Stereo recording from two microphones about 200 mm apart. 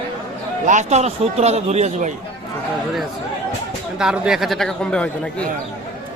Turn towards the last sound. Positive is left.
turn(degrees=5)  # may be behind; listen again after turning